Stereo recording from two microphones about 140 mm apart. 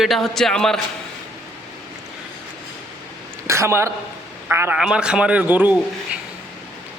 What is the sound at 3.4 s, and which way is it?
A woman's voice, 20° right (ahead or behind).